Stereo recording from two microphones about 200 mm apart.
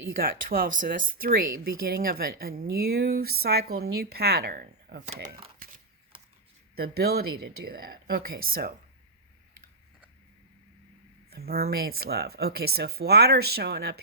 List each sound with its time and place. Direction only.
0.1 s speech: 45° right (ahead or behind)
6.7 s speech: 50° right (ahead or behind)
11.3 s speech: 50° right (ahead or behind)